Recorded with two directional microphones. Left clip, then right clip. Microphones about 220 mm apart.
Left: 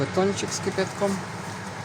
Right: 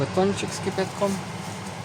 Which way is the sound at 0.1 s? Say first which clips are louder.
Right 1 dB; centre (ahead or behind).